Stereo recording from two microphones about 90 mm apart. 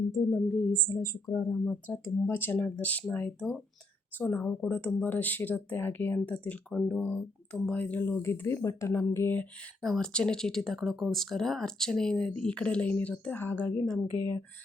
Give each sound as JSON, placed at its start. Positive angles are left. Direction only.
{"t": 0.2, "sound": "a woman's voice", "side_deg": 45}
{"t": 0.5, "sound": "speech", "side_deg": 10}
{"t": 0.9, "sound": "speech", "side_deg": 30}
{"t": 1.6, "sound": "speech", "side_deg": 20}
{"t": 9.8, "sound": "speech", "side_deg": 5}